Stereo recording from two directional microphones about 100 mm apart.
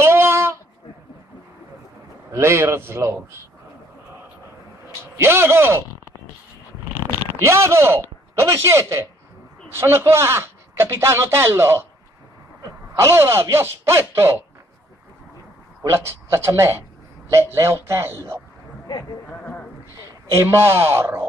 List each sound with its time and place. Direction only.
0.0 s a sound: 25° right (ahead or behind)
2.3 s speech: 25° right (ahead or behind)
5.1 s speech: 25° right (ahead or behind)
7.1 s speech: 25° right (ahead or behind)
12.9 s speech: 25° right (ahead or behind)
15.8 s speech: 25° right (ahead or behind)
19.2 s a sound: 15° left (ahead or behind)
20.2 s speech: 30° right (ahead or behind)